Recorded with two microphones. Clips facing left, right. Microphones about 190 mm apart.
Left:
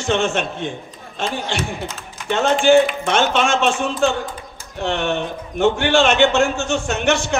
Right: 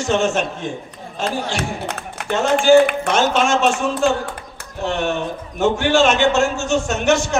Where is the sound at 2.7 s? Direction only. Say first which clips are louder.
Right 2 dB; 60° right (ahead or behind).